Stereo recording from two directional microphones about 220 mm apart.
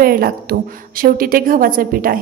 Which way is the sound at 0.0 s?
45° right (ahead or behind).